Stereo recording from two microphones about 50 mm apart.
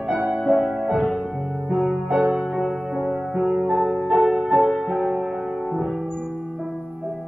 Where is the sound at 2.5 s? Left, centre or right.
Centre.